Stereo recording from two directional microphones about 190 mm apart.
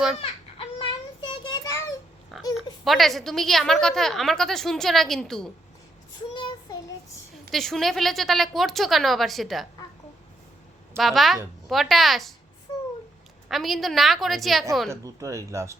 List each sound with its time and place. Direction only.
0.2 s child singing: 30° left (ahead or behind)
2.3 s a woman's voice: centre (ahead or behind)
6.3 s child singing: 25° left (ahead or behind)
7.5 s a woman's voice: centre (ahead or behind)
10.9 s a woman's voice: centre (ahead or behind)
13.5 s a woman's voice: centre (ahead or behind)
14.8 s speech: 15° right (ahead or behind)